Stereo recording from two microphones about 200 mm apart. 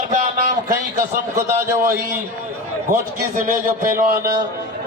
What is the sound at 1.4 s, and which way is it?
Speech, 15° right (ahead or behind).